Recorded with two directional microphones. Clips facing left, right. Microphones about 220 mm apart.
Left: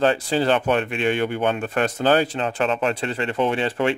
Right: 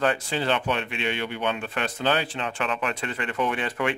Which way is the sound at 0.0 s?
35° left (ahead or behind).